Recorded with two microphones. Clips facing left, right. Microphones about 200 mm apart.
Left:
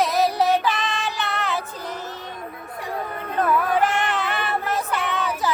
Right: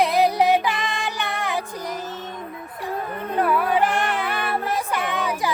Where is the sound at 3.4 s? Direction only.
10° right (ahead or behind).